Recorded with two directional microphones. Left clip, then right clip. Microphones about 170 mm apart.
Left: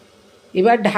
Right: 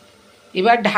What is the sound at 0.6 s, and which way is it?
Speech, 40° left (ahead or behind).